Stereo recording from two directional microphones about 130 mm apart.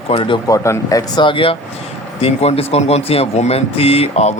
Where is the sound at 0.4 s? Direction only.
25° left (ahead or behind).